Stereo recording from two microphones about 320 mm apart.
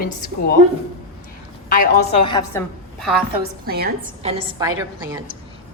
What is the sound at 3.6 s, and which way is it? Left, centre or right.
Speech, right.